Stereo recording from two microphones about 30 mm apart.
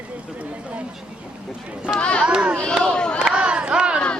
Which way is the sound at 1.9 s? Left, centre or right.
Left.